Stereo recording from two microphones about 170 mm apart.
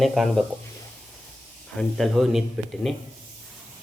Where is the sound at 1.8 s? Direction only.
Centre (ahead or behind).